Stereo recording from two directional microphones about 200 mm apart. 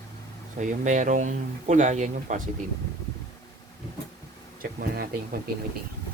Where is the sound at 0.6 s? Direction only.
35° right (ahead or behind).